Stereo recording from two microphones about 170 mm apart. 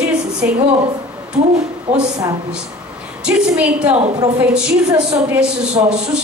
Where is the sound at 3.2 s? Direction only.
5° right (ahead or behind).